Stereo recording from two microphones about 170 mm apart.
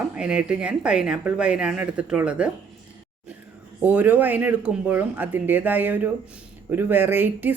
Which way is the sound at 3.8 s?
10° right (ahead or behind).